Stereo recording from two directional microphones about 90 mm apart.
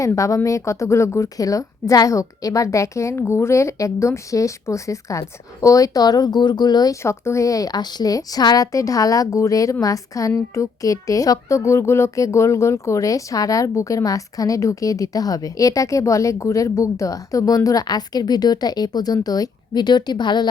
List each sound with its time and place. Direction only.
0.0 s speech: 35° left (ahead or behind)
7.0 s speech: 30° left (ahead or behind); by 20.5 s 55° left (ahead or behind)